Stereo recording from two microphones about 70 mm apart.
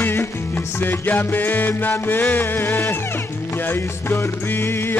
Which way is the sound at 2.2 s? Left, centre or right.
Left.